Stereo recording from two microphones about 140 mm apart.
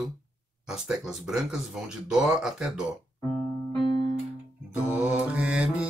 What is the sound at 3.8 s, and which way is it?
Music, 40° left (ahead or behind).